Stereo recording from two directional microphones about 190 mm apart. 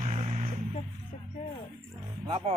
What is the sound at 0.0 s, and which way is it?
Vehicle, 35° right (ahead or behind).